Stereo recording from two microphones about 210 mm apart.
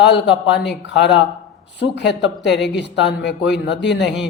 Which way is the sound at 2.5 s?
Centre (ahead or behind).